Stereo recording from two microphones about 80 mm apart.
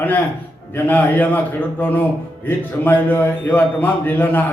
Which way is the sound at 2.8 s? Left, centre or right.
Left.